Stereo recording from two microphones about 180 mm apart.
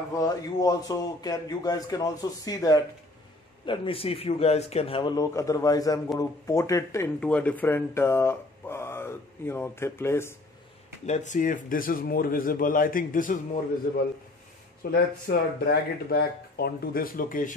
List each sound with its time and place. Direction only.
0.2 s a man's voice: 20° left (ahead or behind)
11.1 s speech: 40° left (ahead or behind)
14.8 s speech: 60° left (ahead or behind)